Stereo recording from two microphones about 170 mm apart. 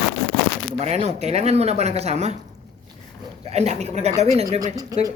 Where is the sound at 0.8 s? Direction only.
40° right (ahead or behind).